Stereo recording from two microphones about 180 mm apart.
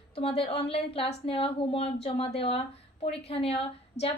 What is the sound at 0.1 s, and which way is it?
A woman's voice, 30° left (ahead or behind).